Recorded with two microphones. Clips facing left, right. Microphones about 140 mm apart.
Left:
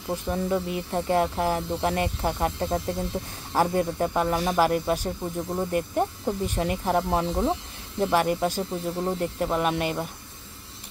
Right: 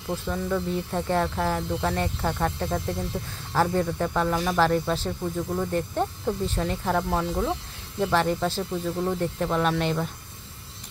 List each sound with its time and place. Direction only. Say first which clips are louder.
0.1 s speech: left 1 dB; 15° left (ahead or behind)
8.0 s speech: left 1 dB; 10° left (ahead or behind)